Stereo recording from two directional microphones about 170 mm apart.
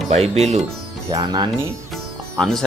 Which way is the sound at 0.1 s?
40° right (ahead or behind).